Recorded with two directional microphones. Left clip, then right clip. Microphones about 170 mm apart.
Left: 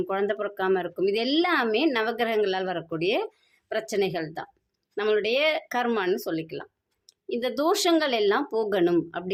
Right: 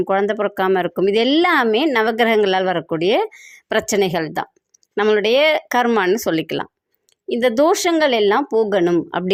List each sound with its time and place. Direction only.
0.0 s speech: 40° right (ahead or behind)